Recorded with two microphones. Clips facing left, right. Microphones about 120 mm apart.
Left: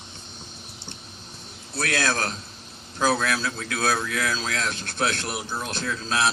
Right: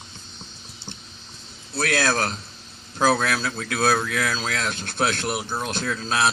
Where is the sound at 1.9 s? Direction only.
40° right (ahead or behind).